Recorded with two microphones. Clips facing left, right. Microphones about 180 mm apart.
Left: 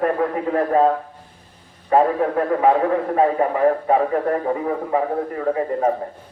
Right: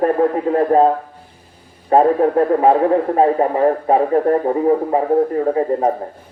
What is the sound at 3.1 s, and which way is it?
A man's voice, 35° right (ahead or behind).